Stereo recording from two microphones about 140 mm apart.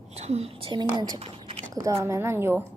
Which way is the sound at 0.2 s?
50° right (ahead or behind).